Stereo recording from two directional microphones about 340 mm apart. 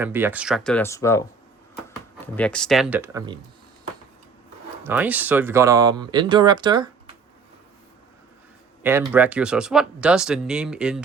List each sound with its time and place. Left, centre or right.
0.0 s speech: centre
2.2 s speech: centre
4.8 s speech: centre
8.8 s speech: centre